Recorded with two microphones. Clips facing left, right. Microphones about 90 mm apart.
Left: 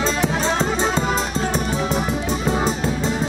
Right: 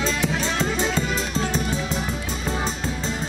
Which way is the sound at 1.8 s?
60° left (ahead or behind).